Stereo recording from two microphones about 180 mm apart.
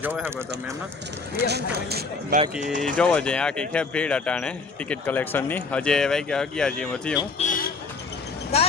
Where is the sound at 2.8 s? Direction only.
5° left (ahead or behind).